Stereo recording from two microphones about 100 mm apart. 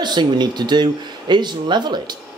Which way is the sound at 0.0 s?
45° right (ahead or behind).